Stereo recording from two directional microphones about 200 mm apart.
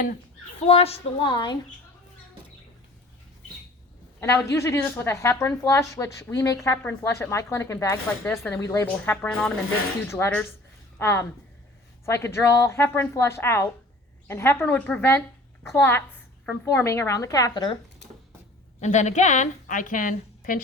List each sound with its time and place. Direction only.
0.6 s a woman's voice: 30° left (ahead or behind)
4.2 s a woman's voice: 15° left (ahead or behind)
18.8 s a woman's voice: 35° left (ahead or behind)